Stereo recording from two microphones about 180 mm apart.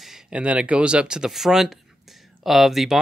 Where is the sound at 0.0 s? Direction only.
5° right (ahead or behind).